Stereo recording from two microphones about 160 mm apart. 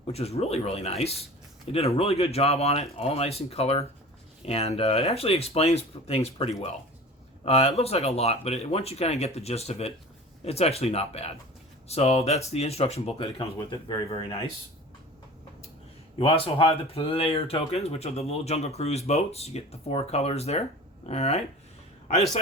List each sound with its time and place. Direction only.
0.1 s speech: 40° left (ahead or behind)
16.1 s a man's voice: 35° left (ahead or behind)